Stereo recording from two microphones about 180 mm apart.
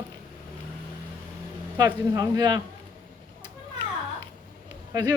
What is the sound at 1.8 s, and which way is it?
Speech, 20° right (ahead or behind).